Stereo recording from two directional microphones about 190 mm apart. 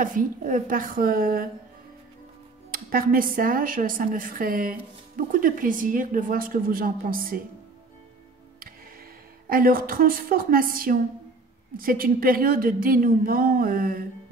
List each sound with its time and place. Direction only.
0.0 s speech: 45° right (ahead or behind)
2.7 s speech: 50° right (ahead or behind)
9.5 s speech: 50° right (ahead or behind)